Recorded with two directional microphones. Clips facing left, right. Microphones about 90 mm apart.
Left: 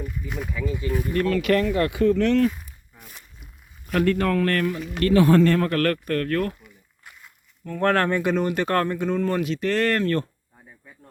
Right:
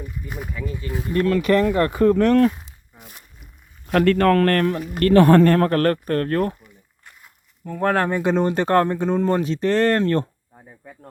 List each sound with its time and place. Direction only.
0.0 s speech: 5° right (ahead or behind)
0.9 s speech: 20° right (ahead or behind)
1.1 s speech: 35° right (ahead or behind)
2.6 s a sound: 20° right (ahead or behind)
3.9 s a man's voice: 65° right (ahead or behind)
4.5 s speech: 50° right (ahead or behind); by 6.6 s 30° right (ahead or behind)
7.6 s speech: 15° right (ahead or behind)
8.2 s speech: 30° right (ahead or behind)